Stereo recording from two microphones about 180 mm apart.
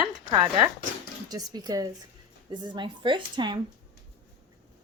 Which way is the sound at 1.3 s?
20° right (ahead or behind).